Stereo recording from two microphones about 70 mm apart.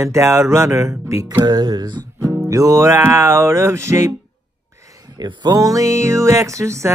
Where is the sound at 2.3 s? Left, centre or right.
Right.